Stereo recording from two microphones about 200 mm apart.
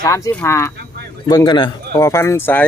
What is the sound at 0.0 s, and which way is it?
A man's voice, 10° left (ahead or behind).